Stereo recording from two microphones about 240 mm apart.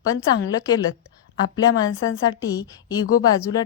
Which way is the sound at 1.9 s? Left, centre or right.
Left.